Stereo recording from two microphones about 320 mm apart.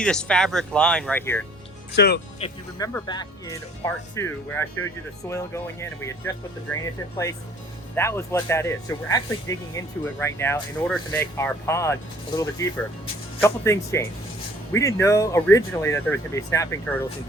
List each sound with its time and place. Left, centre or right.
0.0 s speech: centre
2.0 s speech: left
2.4 s speech: centre
7.9 s speech: centre